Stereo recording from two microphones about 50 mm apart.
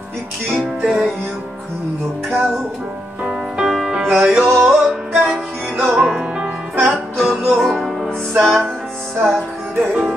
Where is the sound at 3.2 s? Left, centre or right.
Centre.